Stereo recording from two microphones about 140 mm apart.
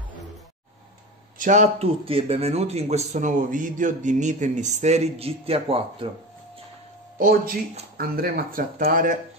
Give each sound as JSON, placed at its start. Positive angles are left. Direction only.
{"t": 1.4, "sound": "speech", "side_deg": -60}
{"t": 1.9, "sound": "speech", "side_deg": -45}
{"t": 7.2, "sound": "speech", "side_deg": -85}